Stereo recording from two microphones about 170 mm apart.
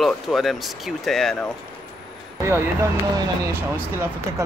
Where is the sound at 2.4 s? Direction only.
15° right (ahead or behind).